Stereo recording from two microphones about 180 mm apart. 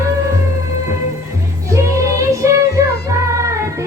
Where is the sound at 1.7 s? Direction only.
15° right (ahead or behind).